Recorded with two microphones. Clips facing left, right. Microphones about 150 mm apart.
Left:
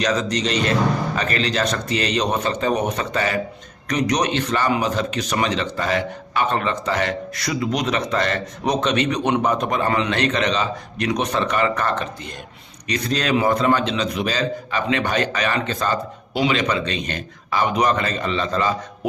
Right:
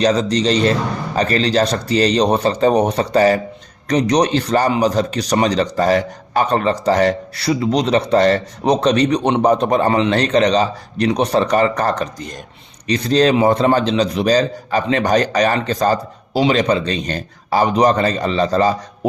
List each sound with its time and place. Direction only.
0.0 s a man's voice: 30° right (ahead or behind)